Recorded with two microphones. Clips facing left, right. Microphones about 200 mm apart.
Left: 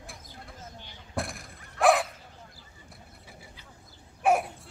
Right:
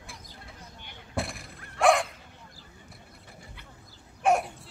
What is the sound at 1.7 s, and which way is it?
Bow-wow, centre (ahead or behind).